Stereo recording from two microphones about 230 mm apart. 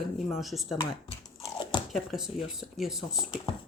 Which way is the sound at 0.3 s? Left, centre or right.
Centre.